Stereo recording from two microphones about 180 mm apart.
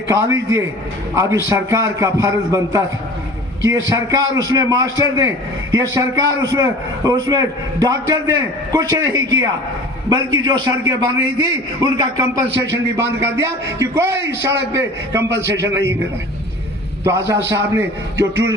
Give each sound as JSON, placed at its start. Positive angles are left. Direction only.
{"t": 0.1, "sound": "a man's voice", "side_deg": -20}
{"t": 17.0, "sound": "speech", "side_deg": -15}